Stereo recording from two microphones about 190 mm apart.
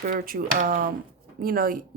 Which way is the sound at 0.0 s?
50° right (ahead or behind).